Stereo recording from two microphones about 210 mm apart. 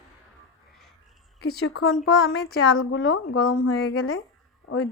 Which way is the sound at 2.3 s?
80° left.